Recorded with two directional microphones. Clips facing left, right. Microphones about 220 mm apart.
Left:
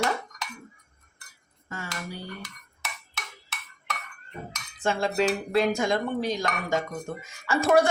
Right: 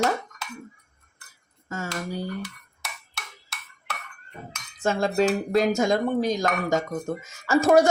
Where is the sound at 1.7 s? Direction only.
45° right (ahead or behind).